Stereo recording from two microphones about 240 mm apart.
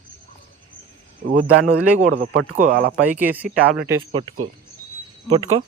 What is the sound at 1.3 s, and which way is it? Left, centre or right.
Speech, right.